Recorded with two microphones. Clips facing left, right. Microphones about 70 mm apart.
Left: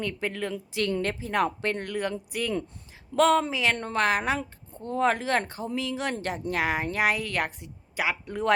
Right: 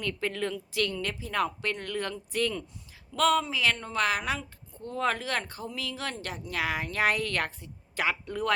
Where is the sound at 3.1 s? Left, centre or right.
Left.